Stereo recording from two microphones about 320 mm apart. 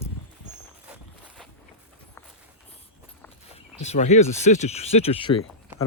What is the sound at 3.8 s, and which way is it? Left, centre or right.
Speech, left.